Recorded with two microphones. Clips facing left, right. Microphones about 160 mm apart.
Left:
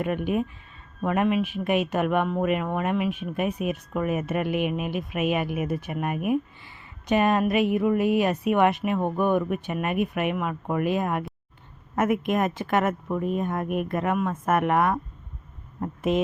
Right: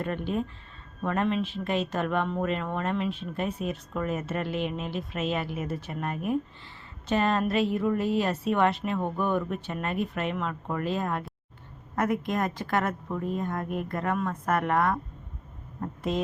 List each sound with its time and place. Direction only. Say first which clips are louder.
0.0 s speech: left 4 dB; 15° left (ahead or behind)